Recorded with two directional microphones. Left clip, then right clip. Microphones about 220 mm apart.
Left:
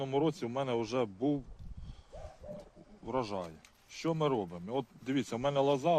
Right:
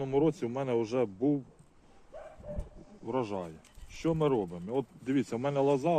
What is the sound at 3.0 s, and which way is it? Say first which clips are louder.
Speech: right 2 dB; 40° left (ahead or behind).